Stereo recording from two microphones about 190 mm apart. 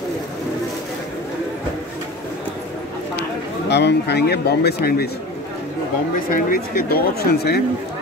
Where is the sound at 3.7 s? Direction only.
60° left (ahead or behind).